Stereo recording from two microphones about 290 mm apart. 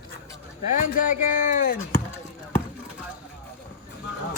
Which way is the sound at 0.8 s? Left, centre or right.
Left.